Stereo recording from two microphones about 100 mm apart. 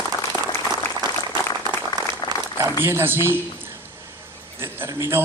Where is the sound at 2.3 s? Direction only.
40° right (ahead or behind).